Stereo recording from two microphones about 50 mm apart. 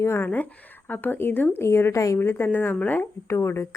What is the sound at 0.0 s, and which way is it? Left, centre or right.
Speech, left.